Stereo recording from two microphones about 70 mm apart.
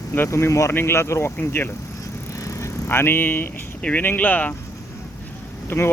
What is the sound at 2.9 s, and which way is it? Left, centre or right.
Speech, left.